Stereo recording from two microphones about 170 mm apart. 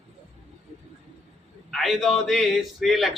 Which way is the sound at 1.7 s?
Centre (ahead or behind).